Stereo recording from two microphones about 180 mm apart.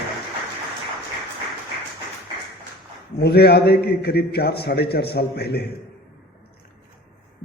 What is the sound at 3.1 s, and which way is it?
A man's voice, 65° left (ahead or behind).